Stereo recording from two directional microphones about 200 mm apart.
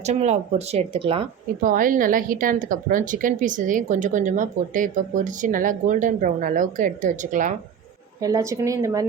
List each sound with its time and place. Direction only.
0.0 s speech: 35° right (ahead or behind)
1.6 s speech: 45° right (ahead or behind)
8.2 s speech: 15° right (ahead or behind)